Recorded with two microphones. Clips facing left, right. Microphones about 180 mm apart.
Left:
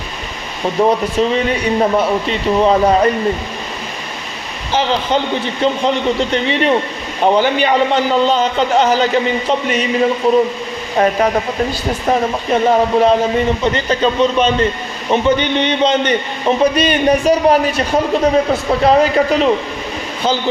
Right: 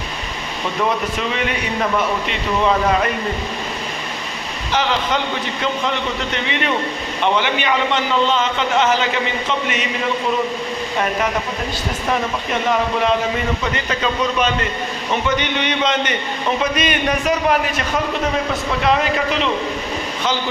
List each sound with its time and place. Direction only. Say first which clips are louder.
0.8 s a man's voice: left 8 dB; 35° left (ahead or behind)
4.7 s a man's voice: left 4 dB; 30° left (ahead or behind)